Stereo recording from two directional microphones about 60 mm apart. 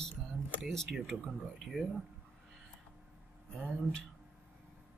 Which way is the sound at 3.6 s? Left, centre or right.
Centre.